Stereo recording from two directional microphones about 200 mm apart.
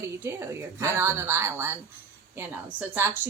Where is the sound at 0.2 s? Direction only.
10° right (ahead or behind).